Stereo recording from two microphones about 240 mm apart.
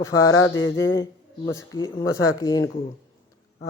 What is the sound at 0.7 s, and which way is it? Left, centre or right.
Speech, centre.